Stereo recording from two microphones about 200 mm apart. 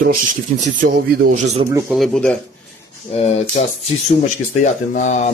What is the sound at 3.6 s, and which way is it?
Speech, 40° left (ahead or behind).